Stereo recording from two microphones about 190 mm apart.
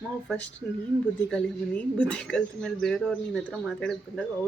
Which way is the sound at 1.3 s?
5° left (ahead or behind).